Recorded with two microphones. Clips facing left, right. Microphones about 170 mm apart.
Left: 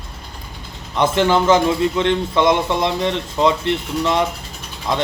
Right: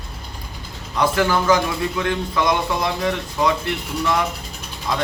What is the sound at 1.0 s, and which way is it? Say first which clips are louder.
A man's voice: left 3 dB; 25° left (ahead or behind).